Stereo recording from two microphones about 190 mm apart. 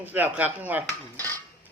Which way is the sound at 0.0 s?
10° right (ahead or behind).